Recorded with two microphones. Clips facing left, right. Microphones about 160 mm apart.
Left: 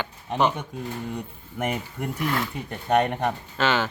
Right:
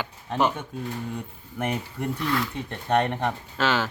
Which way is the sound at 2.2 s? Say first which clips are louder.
Left 1 dB; 45° left (ahead or behind).